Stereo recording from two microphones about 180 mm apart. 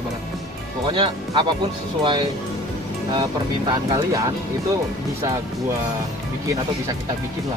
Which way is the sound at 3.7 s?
20° right (ahead or behind).